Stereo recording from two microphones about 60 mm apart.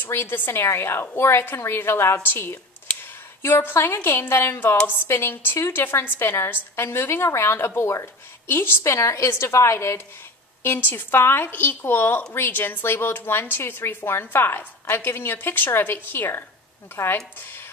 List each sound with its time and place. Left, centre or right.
0.0 s a woman's voice: left
8.8 s a woman's voice: left
10.6 s a woman's voice: left